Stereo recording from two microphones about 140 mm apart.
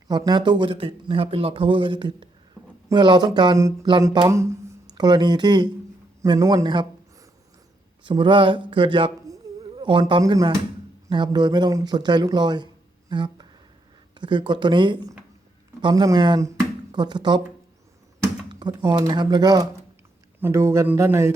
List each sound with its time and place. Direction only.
0.1 s speech: 30° right (ahead or behind)
9.2 s a sound: 30° right (ahead or behind)
11.1 s speech: 30° right (ahead or behind)
13.1 s a sound: 35° right (ahead or behind)
14.2 s speech: 35° right (ahead or behind)
18.4 s speech: 30° right (ahead or behind)
20.4 s speech: 20° right (ahead or behind)